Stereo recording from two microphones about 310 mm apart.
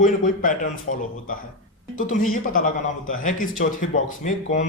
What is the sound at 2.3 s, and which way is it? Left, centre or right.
Speech, left.